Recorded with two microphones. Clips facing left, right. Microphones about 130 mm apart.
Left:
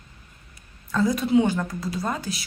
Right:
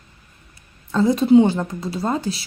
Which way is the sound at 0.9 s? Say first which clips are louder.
Right 7 dB; 25° right (ahead or behind).